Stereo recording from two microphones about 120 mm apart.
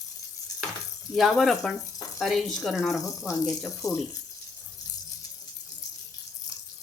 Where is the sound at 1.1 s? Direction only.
Centre (ahead or behind).